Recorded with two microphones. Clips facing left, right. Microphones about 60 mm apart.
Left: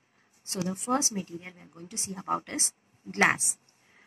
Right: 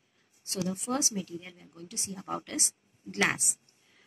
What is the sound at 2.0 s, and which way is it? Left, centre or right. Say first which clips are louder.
A woman's voice: left 5 dB; left.